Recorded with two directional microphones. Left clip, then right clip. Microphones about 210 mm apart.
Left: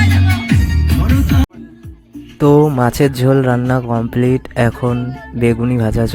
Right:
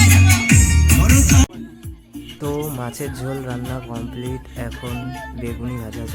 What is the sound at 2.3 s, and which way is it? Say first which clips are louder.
Speech: left 15 dB; 30° left (ahead or behind).